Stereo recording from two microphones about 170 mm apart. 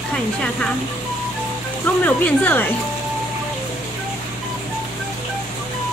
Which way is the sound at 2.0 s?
10° left (ahead or behind).